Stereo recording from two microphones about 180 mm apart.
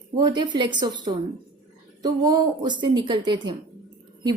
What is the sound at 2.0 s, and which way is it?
A woman's voice, 20° right (ahead or behind).